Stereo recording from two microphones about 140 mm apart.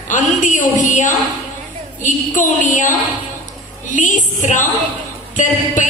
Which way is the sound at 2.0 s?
65° left (ahead or behind).